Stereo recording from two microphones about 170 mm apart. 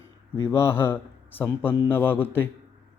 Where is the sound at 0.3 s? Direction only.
15° left (ahead or behind).